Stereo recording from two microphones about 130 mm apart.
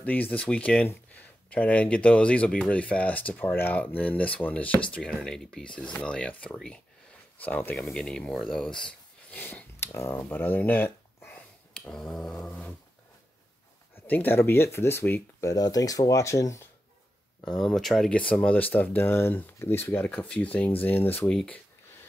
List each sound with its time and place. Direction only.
0.0 s speech: 10° left (ahead or behind)
14.0 s speech: 15° left (ahead or behind)
15.5 s speech: 30° left (ahead or behind)
17.5 s speech: 5° left (ahead or behind)
21.3 s speech: 5° left (ahead or behind)